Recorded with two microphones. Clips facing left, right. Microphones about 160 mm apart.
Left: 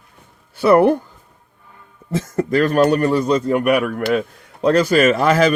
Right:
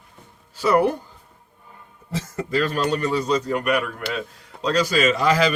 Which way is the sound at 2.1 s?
50° left (ahead or behind).